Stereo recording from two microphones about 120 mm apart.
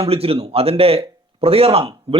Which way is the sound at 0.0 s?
55° right (ahead or behind).